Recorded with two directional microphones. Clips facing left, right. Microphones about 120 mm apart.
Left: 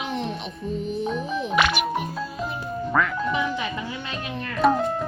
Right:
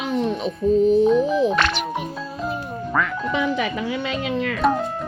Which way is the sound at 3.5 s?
90° right.